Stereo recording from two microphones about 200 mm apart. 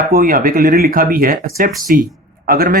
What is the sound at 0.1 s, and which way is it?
Speech, 45° right (ahead or behind).